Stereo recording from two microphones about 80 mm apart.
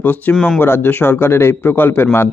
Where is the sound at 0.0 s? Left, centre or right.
Left.